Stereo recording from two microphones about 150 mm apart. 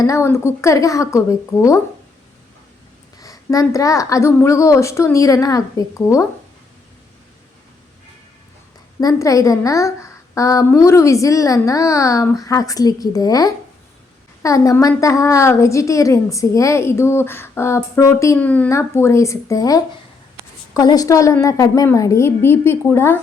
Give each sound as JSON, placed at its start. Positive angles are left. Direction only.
{"t": 0.0, "sound": "a woman's voice", "side_deg": 20}
{"t": 3.2, "sound": "a woman's voice", "side_deg": 25}
{"t": 9.0, "sound": "a woman's voice", "side_deg": 25}